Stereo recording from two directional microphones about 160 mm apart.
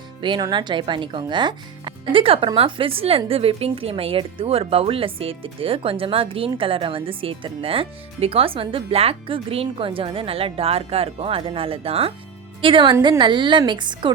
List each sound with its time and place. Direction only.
0.2 s speech: 30° right (ahead or behind)